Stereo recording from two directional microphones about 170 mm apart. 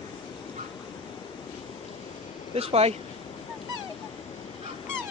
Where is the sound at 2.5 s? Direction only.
35° right (ahead or behind).